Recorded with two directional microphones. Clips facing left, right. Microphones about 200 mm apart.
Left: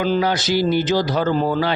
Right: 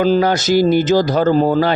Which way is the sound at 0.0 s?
45° right (ahead or behind).